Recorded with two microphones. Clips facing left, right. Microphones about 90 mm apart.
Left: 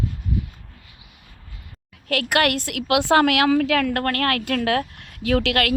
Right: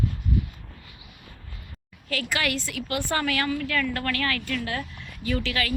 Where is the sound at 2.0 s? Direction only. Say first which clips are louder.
Left 8 dB; 65° left (ahead or behind); by 4.0 s 80° left.